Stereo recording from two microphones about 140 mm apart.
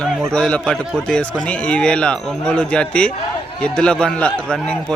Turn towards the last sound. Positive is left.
turn(degrees=5)  # may be behind; listen again after turning